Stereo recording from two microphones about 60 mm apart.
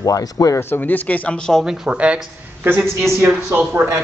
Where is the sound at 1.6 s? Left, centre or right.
Centre.